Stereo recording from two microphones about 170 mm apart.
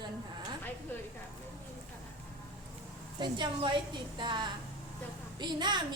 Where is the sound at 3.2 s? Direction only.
25° right (ahead or behind).